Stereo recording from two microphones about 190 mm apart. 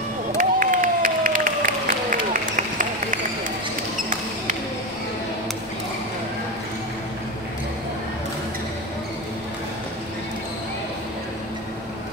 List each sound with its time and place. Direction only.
0.4 s applause: 45° right (ahead or behind)